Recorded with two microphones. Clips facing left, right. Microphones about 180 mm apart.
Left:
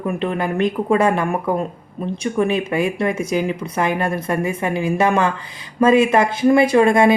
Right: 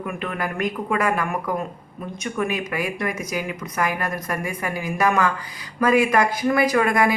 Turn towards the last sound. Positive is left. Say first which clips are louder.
# left 6 dB
turn(degrees=25)  # may be behind; listen again after turning